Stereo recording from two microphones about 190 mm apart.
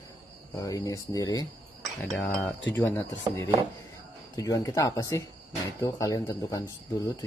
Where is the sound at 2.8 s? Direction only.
15° left (ahead or behind).